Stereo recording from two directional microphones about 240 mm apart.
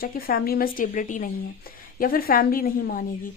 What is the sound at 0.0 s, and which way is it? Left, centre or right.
Speech, left.